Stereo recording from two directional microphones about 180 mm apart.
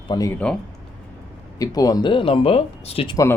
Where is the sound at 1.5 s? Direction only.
20° left (ahead or behind).